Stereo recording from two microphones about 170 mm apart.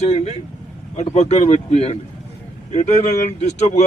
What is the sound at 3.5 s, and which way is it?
Speech, 40° left (ahead or behind).